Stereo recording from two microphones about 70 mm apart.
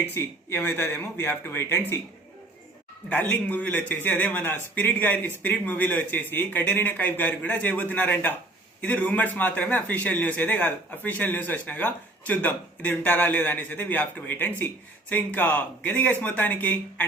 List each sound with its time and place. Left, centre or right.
0.1 s speech: left
3.1 s a man's voice: left